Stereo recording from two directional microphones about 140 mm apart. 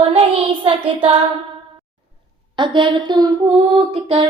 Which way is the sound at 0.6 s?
40° right (ahead or behind).